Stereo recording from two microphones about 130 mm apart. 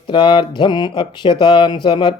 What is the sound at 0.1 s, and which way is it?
Speech, 40° left (ahead or behind).